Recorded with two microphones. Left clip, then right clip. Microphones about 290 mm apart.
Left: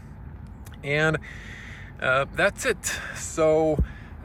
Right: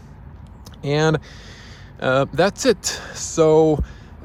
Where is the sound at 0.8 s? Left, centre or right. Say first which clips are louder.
Right 4 dB; centre.